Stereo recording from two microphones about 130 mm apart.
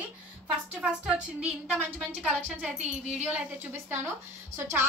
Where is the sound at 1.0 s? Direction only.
5° right (ahead or behind).